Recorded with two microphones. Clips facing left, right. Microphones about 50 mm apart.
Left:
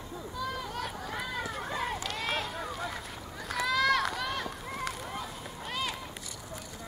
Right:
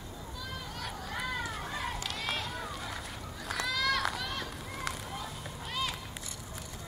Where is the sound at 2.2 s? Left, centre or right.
Centre.